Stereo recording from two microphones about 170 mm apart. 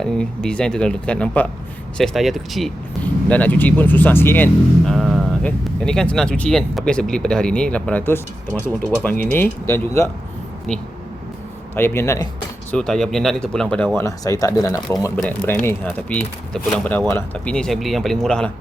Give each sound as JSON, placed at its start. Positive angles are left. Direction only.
{"t": 0.0, "sound": "speech", "side_deg": 5}
{"t": 4.9, "sound": "speech", "side_deg": 0}
{"t": 11.7, "sound": "speech", "side_deg": 15}
{"t": 12.7, "sound": "speech", "side_deg": 5}